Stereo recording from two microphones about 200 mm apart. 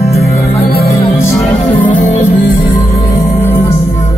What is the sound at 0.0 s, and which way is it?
Music, 50° left (ahead or behind).